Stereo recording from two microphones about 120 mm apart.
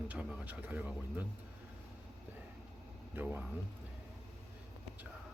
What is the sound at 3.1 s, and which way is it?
Speech, 15° right (ahead or behind).